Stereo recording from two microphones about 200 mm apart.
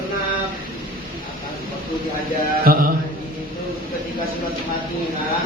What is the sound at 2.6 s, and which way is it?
Speech, 45° right (ahead or behind).